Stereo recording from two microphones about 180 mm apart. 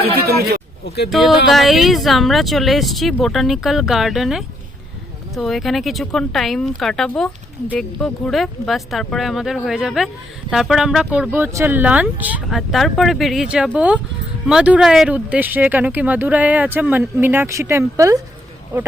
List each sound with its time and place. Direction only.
0.0 s speech: 60° right (ahead or behind)
1.5 s speech: centre (ahead or behind); by 18.2 s 15° right (ahead or behind)